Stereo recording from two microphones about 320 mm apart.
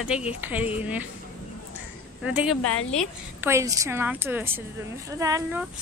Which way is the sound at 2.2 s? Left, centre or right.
Centre.